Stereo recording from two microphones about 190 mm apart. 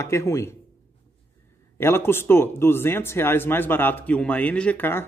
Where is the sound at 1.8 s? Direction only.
10° left (ahead or behind).